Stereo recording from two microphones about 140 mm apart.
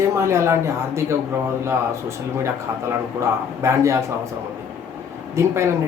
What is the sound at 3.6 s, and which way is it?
Speech, 20° right (ahead or behind).